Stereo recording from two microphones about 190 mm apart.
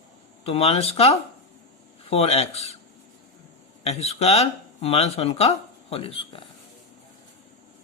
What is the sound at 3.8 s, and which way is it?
Speech, 35° left (ahead or behind).